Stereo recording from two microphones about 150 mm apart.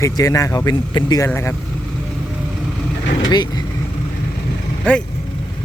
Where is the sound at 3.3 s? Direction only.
30° left (ahead or behind).